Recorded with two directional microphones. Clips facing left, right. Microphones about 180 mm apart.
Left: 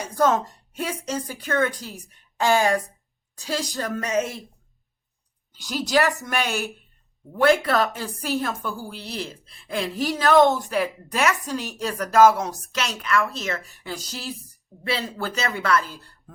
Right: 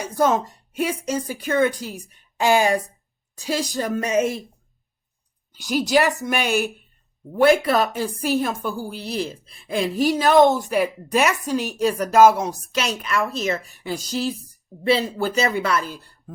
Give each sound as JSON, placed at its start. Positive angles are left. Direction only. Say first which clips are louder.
{"t": 0.2, "sound": "a woman's voice", "louder": "right 1 dB", "side_deg": -15}
{"t": 5.5, "sound": "a woman's voice", "louder": "right 3 dB", "side_deg": -10}